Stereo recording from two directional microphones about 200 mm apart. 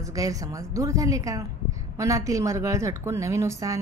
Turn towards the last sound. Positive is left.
turn(degrees=-15)  # may be behind; listen again after turning